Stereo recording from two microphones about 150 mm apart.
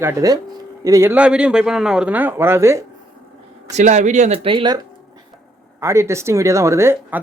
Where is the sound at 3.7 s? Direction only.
55° right (ahead or behind); by 4.7 s 35° right (ahead or behind).